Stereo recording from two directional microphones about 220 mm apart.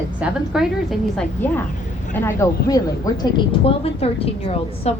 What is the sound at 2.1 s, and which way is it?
A woman's voice, 10° left (ahead or behind).